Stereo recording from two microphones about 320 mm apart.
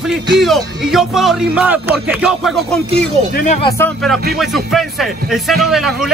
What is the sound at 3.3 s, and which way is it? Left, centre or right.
Speech, left.